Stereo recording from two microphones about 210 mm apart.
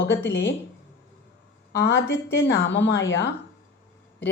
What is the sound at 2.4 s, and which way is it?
Music, 55° left (ahead or behind).